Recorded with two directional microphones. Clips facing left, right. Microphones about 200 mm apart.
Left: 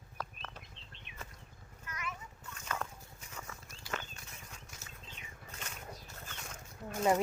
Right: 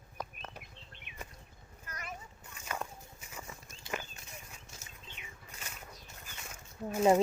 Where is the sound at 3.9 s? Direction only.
20° right (ahead or behind).